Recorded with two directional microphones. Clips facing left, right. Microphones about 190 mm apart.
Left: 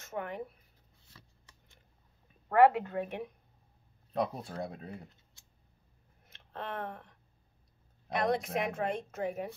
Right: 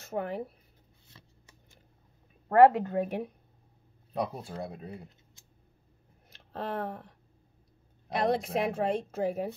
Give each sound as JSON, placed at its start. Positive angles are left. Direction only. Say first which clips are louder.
{"t": 0.0, "sound": "speech", "louder": "right 5 dB", "side_deg": -35}
{"t": 2.4, "sound": "a woman's voice", "louder": "right 4 dB", "side_deg": -40}
{"t": 4.1, "sound": "speech", "louder": "even", "side_deg": 0}
{"t": 6.3, "sound": "a woman's voice", "louder": "right 5 dB", "side_deg": -35}